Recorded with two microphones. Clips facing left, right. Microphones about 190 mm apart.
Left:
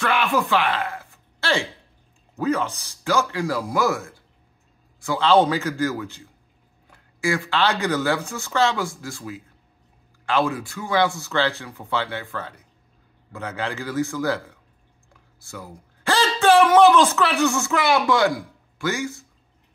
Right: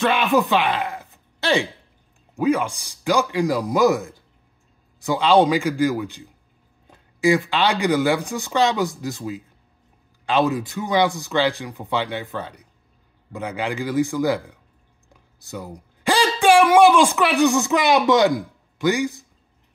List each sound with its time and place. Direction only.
0.0 s speech: 20° right (ahead or behind)